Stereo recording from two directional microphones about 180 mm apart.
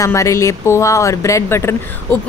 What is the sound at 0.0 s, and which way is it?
Speech, 15° left (ahead or behind).